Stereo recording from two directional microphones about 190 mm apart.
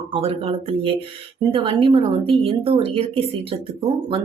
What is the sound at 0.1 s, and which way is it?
Speech, 30° right (ahead or behind).